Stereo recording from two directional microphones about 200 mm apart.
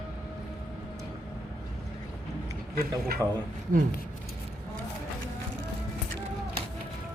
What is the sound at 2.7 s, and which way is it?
Speech, 50° right (ahead or behind).